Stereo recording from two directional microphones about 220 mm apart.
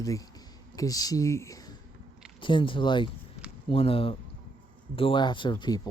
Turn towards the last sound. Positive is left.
turn(degrees=20)  # may be behind; listen again after turning